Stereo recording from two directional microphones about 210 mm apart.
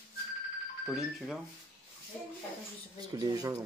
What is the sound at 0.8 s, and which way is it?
Speech, centre (ahead or behind).